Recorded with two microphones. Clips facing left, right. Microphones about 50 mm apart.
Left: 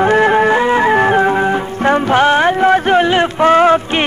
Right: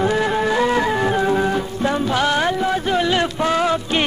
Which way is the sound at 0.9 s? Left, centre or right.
Left.